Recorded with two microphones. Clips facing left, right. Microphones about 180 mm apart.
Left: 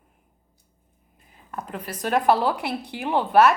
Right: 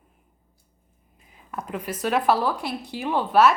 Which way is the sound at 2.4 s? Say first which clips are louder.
Left 2 dB; 65° left (ahead or behind).